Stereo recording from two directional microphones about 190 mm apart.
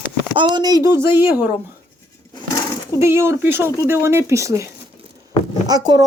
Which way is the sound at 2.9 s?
15° right (ahead or behind).